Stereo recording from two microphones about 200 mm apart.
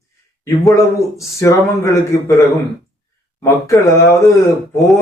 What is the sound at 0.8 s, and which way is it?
A man's voice, 15° left (ahead or behind).